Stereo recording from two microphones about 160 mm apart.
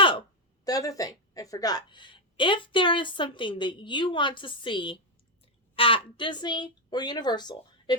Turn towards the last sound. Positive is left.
turn(degrees=25)  # may be behind; listen again after turning